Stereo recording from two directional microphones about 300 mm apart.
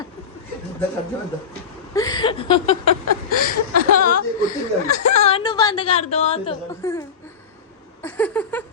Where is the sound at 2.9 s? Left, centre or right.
Left.